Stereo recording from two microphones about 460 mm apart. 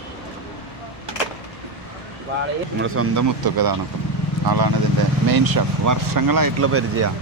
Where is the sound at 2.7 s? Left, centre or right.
Right.